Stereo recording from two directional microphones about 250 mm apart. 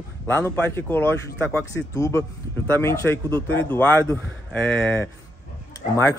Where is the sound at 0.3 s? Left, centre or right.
Centre.